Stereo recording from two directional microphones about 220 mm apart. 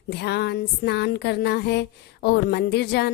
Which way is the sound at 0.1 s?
50° left (ahead or behind).